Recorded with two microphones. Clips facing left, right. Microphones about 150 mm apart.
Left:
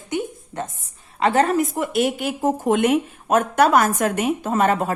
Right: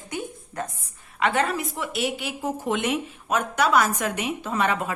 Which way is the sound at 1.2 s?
40° left (ahead or behind).